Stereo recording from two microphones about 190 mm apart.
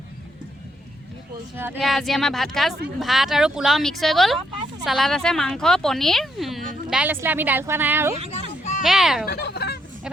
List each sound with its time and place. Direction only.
1.5 s speech: 10° right (ahead or behind)
1.8 s speech: centre (ahead or behind)
8.3 s a sound: 35° left (ahead or behind)
8.8 s speech: centre (ahead or behind)
9.2 s fowl: 55° left (ahead or behind)